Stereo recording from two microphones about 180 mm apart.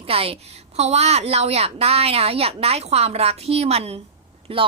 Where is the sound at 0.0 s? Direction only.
30° right (ahead or behind).